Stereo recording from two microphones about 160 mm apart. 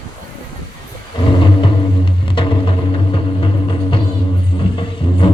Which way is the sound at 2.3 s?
35° left (ahead or behind).